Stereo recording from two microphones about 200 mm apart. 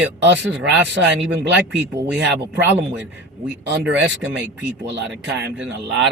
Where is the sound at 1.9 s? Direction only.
10° right (ahead or behind).